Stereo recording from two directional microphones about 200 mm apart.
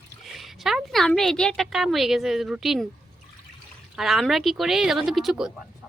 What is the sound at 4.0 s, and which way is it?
Speech, centre (ahead or behind).